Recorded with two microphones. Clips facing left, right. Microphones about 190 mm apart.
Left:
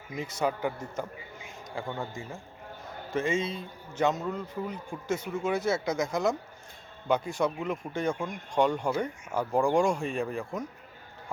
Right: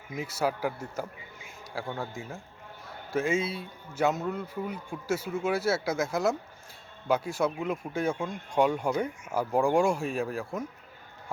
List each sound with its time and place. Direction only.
0.2 s a man's voice: 5° right (ahead or behind)